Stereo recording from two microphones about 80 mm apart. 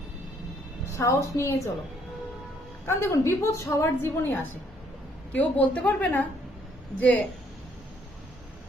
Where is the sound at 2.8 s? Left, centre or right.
Left.